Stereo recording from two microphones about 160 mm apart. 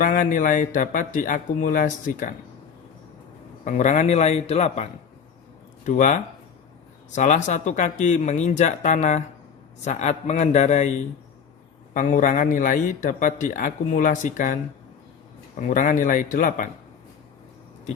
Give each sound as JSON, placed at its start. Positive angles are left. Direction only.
{"t": 0.0, "sound": "a man's voice", "side_deg": 55}
{"t": 3.6, "sound": "speech", "side_deg": 50}
{"t": 7.2, "sound": "speech", "side_deg": 50}
{"t": 11.9, "sound": "a man's voice", "side_deg": 55}
{"t": 15.6, "sound": "a man's voice", "side_deg": 55}